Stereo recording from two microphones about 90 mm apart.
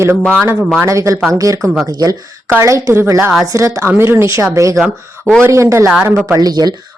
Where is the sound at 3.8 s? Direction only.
25° right (ahead or behind).